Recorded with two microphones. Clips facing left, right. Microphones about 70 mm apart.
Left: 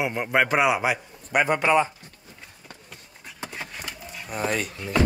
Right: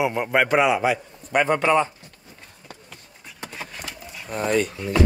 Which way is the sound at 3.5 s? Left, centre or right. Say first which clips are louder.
Right 2 dB; centre.